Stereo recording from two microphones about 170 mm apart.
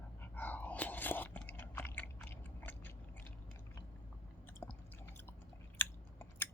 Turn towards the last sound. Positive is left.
turn(degrees=10)  # may be behind; listen again after turning